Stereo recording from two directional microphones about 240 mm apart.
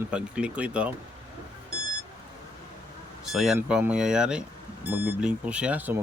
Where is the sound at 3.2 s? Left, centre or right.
Centre.